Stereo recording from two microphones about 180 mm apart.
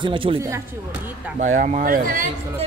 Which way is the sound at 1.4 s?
45° right (ahead or behind).